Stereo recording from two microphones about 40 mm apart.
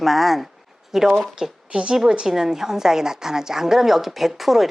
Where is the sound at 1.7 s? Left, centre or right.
Right.